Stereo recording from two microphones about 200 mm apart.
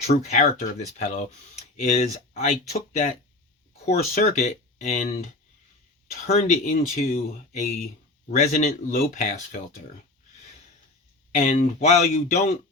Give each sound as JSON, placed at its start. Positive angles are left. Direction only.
{"t": 0.1, "sound": "speech", "side_deg": 35}
{"t": 6.2, "sound": "speech", "side_deg": 40}
{"t": 11.3, "sound": "speech", "side_deg": 35}